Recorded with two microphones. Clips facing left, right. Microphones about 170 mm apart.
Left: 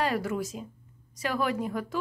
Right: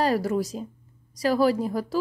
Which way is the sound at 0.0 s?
35° right (ahead or behind).